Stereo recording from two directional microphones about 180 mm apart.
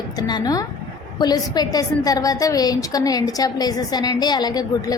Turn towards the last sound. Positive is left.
turn(degrees=20)  # may be behind; listen again after turning